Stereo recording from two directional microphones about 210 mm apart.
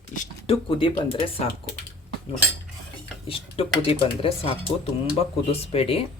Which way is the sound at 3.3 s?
25° left (ahead or behind).